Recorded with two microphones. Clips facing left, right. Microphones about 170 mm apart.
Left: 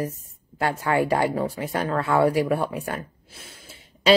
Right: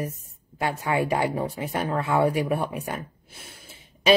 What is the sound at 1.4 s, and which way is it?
A woman's voice, 20° right (ahead or behind).